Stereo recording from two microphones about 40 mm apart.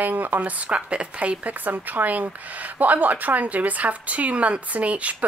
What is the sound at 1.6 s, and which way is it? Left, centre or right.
Speech, right.